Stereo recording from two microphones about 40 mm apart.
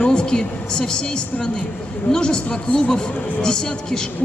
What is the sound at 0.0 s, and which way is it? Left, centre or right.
Speech, left.